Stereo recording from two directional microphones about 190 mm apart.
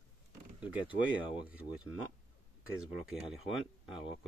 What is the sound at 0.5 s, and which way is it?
Speech, 5° right (ahead or behind).